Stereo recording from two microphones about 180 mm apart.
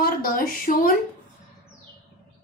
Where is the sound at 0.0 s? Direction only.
55° left (ahead or behind).